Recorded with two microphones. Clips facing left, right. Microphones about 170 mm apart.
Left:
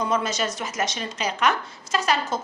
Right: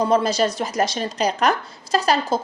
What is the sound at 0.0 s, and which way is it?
A woman's voice, 35° right (ahead or behind).